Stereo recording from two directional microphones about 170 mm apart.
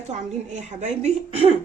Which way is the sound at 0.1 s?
45° right (ahead or behind).